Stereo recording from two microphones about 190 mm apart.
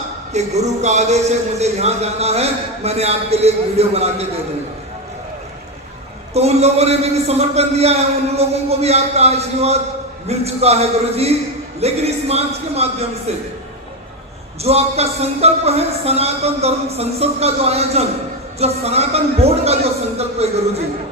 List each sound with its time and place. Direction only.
0.3 s a man's voice: 35° right (ahead or behind)
6.3 s a man's voice: 35° right (ahead or behind)
14.6 s a man's voice: 35° right (ahead or behind)